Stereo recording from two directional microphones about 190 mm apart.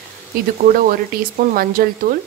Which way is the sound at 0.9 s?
50° right (ahead or behind).